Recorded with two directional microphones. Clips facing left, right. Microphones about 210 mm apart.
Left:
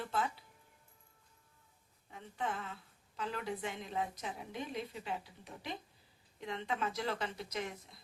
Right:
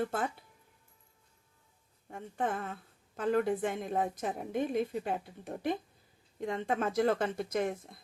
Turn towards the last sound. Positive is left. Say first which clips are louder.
# right 9 dB
turn(degrees=-50)  # may be behind; listen again after turning